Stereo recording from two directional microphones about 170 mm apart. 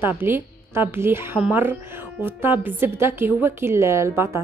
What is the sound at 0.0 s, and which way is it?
A woman's voice, 10° right (ahead or behind).